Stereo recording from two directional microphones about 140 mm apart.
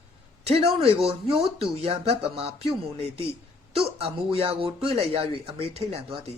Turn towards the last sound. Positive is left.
turn(degrees=-45)  # may be behind; listen again after turning